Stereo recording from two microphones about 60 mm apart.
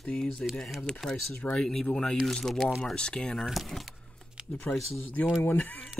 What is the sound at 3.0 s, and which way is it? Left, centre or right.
Speech, centre.